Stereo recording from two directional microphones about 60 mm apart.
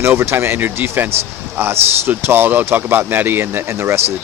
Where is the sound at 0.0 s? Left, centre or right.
Right.